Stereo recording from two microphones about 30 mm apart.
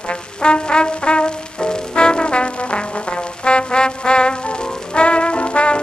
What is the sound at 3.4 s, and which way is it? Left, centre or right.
Trombone, left.